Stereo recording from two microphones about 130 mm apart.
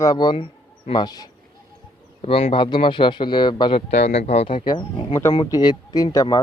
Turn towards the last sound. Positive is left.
turn(degrees=30)  # may be behind; listen again after turning